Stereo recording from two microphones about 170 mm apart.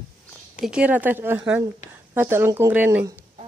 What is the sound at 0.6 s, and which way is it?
Speech, 5° right (ahead or behind).